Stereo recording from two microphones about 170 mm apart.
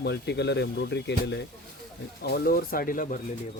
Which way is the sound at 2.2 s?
70° left (ahead or behind).